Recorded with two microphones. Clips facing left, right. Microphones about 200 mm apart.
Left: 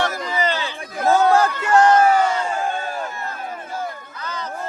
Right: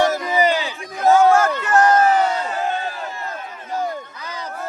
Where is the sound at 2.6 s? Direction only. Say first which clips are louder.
Even; 50° left (ahead or behind).